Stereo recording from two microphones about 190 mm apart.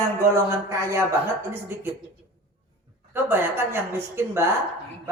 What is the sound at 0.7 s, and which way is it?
Speech, 15° right (ahead or behind).